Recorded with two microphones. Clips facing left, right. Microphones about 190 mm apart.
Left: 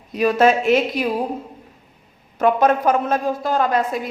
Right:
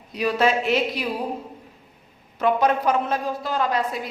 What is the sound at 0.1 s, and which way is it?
Speech, 50° left (ahead or behind).